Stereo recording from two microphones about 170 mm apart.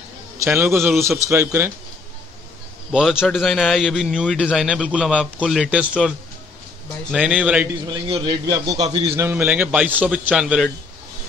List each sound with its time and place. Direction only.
0.4 s a man's voice: 15° right (ahead or behind)
2.9 s a man's voice: 5° right (ahead or behind)
7.8 s a man's voice: 25° right (ahead or behind); by 10.7 s 5° right (ahead or behind)